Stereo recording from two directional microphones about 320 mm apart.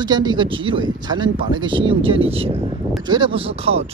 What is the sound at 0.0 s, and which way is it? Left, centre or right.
Speech, centre.